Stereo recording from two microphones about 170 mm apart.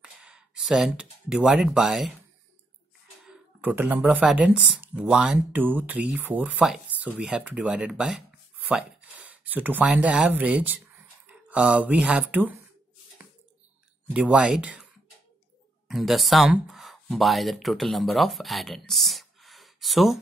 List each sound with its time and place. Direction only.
0.0 s speech: 5° right (ahead or behind)
3.3 s speech: 10° right (ahead or behind)
14.1 s speech: 5° right (ahead or behind)
15.9 s speech: centre (ahead or behind)